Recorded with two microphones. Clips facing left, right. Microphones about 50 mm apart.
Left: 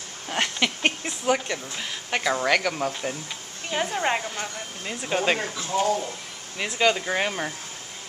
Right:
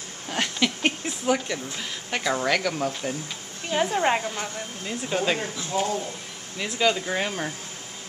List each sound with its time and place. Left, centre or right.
0.3 s a sound: centre
1.0 s a woman's voice: centre
4.8 s speech: centre